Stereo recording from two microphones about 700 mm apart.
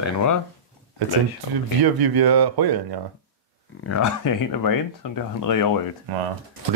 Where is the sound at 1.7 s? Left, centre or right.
Right.